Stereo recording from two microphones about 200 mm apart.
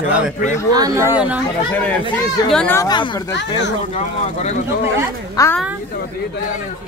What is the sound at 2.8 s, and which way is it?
Speech, 20° left (ahead or behind).